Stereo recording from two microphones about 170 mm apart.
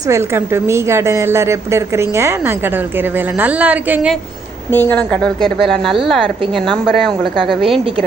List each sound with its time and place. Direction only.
0.1 s a woman's voice: 15° right (ahead or behind)
4.7 s a woman's voice: 10° left (ahead or behind)
6.2 s a woman's voice: 30° right (ahead or behind)
6.7 s a woman's voice: centre (ahead or behind)